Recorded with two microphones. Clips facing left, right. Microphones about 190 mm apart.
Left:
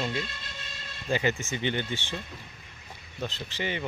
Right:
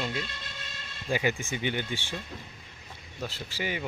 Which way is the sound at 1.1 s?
10° right (ahead or behind).